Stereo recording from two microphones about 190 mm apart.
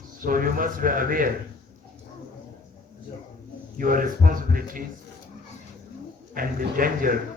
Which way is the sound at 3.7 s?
45° right (ahead or behind).